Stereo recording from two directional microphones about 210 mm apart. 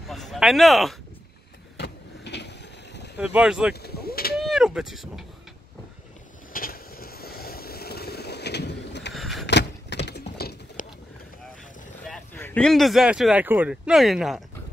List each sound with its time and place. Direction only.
0.1 s speech: centre (ahead or behind)
1.8 s vehicle: 55° left (ahead or behind)
3.2 s speech: 5° right (ahead or behind)
3.7 s a sound: 50° left (ahead or behind)
4.4 s speech: centre (ahead or behind)
6.5 s vehicle: 45° left (ahead or behind)
9.1 s vehicle: centre (ahead or behind)
9.5 s keys jangling: 55° left (ahead or behind)
12.4 s speech: 5° left (ahead or behind)